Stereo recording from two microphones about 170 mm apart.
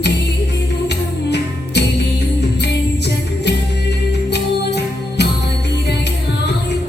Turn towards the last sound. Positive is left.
turn(degrees=80)